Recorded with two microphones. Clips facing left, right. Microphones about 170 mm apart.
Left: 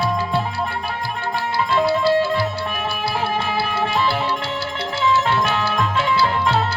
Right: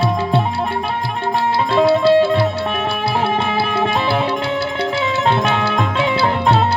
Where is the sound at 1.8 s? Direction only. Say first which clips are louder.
Right 5 dB; 60° right (ahead or behind).